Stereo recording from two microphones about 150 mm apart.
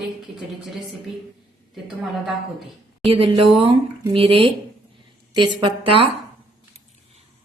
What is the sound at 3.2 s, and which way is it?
Speech, 35° right (ahead or behind).